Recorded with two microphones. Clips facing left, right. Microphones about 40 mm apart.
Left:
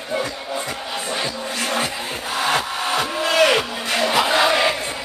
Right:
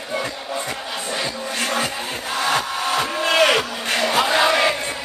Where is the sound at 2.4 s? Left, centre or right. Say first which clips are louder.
Even; centre.